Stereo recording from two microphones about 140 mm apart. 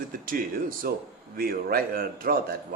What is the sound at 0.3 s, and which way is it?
Speech, 90° right.